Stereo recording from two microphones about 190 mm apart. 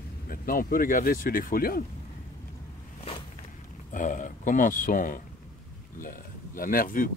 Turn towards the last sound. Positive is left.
turn(degrees=45)  # may be behind; listen again after turning